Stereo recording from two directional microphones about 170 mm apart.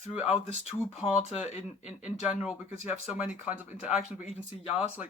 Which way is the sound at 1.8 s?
5° right (ahead or behind).